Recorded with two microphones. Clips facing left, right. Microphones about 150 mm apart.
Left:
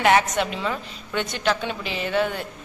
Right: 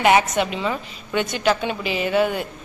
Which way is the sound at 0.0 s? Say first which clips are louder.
Right 2 dB; 10° right (ahead or behind).